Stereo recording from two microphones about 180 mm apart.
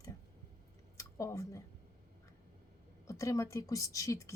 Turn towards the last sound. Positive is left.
turn(degrees=15)  # may be behind; listen again after turning